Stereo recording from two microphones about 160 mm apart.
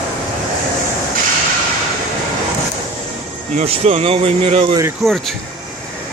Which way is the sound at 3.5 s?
40° right (ahead or behind).